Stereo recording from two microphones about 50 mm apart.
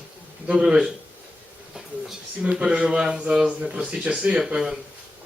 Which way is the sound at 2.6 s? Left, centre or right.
Right.